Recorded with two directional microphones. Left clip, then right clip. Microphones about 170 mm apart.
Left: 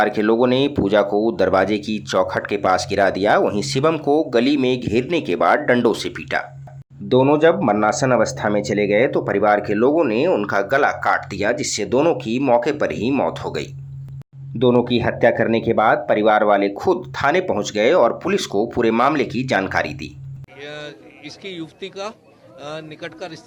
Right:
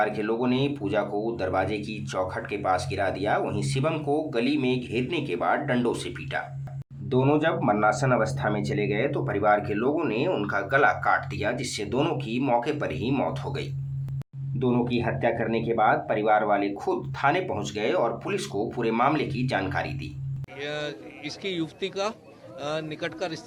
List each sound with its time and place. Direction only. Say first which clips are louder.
0.0 s speech: left 9 dB; 45° left (ahead or behind)
14.6 s speech: left 10 dB; 30° left (ahead or behind)
14.8 s speech: left 9 dB; 40° left (ahead or behind)
20.6 s a man's voice: right 1 dB; centre (ahead or behind)